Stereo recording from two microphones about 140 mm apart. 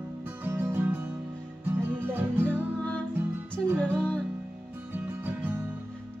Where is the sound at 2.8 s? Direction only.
5° left (ahead or behind).